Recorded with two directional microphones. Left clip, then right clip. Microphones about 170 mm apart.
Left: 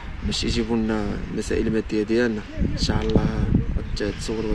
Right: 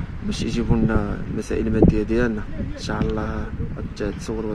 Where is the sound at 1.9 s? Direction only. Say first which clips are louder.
Right 1 dB; 40° right (ahead or behind).